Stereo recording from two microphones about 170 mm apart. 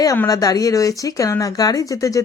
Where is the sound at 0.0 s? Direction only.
20° left (ahead or behind).